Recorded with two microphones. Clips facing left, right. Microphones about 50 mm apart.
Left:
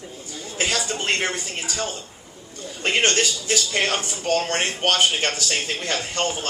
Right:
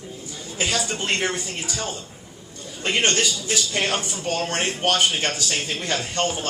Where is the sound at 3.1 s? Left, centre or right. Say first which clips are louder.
Left 1 dB; left.